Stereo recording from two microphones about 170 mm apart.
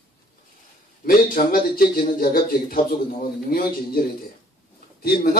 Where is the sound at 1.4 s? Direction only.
60° left (ahead or behind).